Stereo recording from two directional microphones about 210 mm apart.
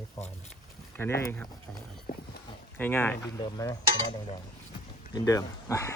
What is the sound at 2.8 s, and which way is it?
Speech, 10° left (ahead or behind).